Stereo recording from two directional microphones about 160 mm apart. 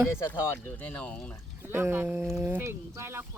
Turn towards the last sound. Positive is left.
turn(degrees=-15)  # may be behind; listen again after turning